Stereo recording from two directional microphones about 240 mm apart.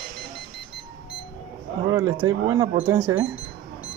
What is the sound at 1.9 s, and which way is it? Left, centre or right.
Speech, centre.